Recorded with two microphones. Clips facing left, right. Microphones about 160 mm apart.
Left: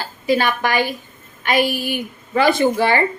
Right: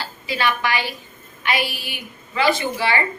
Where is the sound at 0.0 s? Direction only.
45° left (ahead or behind).